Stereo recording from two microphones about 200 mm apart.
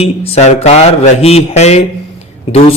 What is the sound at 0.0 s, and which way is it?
Speech, 30° left (ahead or behind).